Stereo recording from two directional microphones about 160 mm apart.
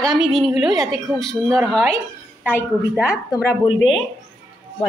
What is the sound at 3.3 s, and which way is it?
Speech, 25° left (ahead or behind).